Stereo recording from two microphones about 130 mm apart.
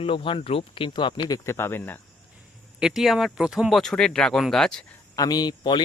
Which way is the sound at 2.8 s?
5° right (ahead or behind).